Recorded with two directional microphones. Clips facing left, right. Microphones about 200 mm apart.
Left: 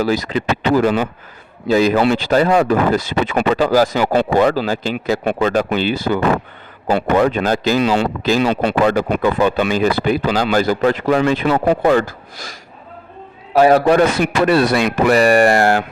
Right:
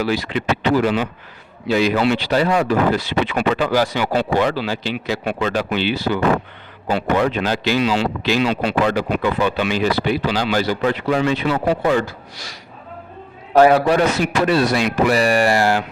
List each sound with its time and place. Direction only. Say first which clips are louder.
0.0 s speech: left 3 dB; 40° left (ahead or behind)
13.7 s speech: left 3 dB; 45° left (ahead or behind)